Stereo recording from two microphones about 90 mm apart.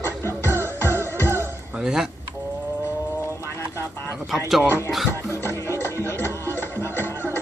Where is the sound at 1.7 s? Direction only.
5° right (ahead or behind).